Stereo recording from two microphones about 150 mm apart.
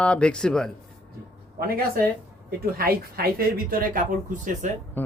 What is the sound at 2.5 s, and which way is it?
Speech, 85° right.